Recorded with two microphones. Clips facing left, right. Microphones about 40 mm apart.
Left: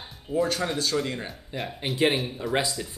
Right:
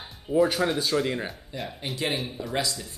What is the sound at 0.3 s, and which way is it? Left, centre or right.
Speech, centre.